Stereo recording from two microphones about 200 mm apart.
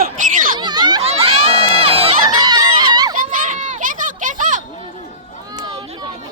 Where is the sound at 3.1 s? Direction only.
40° right (ahead or behind).